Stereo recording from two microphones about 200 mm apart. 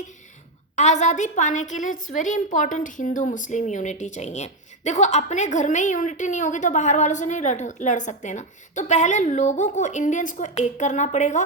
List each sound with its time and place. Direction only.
0.8 s a woman's voice: 35° left (ahead or behind)